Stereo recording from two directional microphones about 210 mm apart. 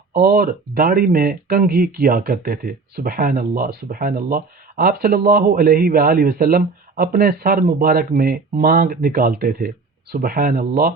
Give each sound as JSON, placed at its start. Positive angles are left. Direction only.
{"t": 0.1, "sound": "speech", "side_deg": -45}